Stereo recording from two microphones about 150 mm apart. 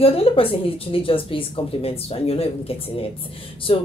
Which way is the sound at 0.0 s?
40° left (ahead or behind).